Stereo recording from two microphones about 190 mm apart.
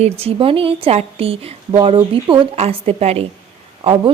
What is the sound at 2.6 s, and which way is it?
Speech, 35° right (ahead or behind).